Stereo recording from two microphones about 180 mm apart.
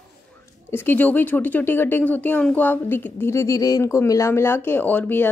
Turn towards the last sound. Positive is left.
turn(degrees=10)  # may be behind; listen again after turning